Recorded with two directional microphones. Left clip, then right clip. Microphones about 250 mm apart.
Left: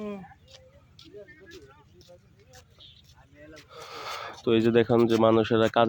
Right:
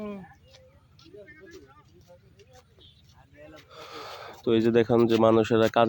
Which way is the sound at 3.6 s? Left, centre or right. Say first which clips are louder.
Left 3 dB; centre.